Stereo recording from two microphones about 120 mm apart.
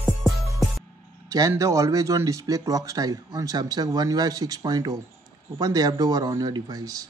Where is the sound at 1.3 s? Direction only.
30° right (ahead or behind).